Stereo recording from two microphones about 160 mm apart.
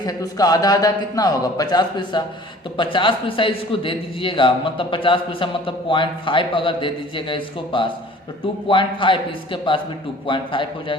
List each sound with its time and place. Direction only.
0.0 s a man's voice: 25° left (ahead or behind)